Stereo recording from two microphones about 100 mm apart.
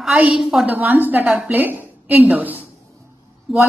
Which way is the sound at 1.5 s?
20° right (ahead or behind).